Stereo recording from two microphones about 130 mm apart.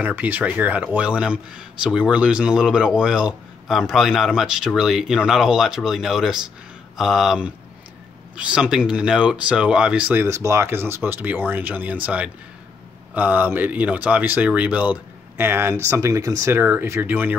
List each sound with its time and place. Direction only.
0.0 s speech: 15° right (ahead or behind)
10.2 s speech: 20° right (ahead or behind)